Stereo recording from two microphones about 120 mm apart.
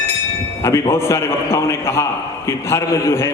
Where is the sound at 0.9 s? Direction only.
20° left (ahead or behind).